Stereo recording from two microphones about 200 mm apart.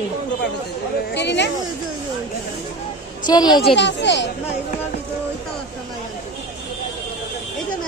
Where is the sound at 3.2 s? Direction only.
20° left (ahead or behind).